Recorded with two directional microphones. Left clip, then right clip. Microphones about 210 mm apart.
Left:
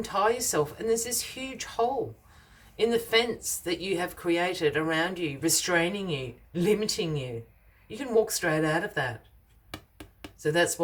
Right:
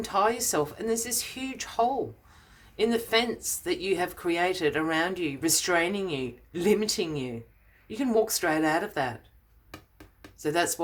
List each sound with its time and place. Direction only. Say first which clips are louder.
0.0 s a woman's voice: even; 30° right (ahead or behind)
9.7 s a sound: left 4 dB; 5° left (ahead or behind)
10.3 s speech: left 2 dB; 30° right (ahead or behind)